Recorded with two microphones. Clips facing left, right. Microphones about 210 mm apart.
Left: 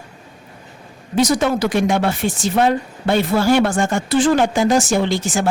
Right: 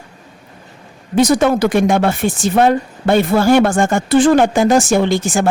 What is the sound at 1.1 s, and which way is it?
Speech, 55° right (ahead or behind).